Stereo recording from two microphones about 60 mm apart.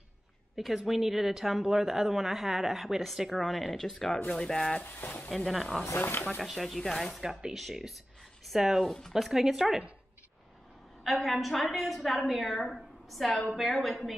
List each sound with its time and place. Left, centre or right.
0.6 s a woman's voice: centre
4.8 s speech: left
5.3 s a woman's voice: centre
5.9 s speech: left
6.4 s a woman's voice: centre
7.2 s a woman's voice: centre
11.1 s a woman's voice: centre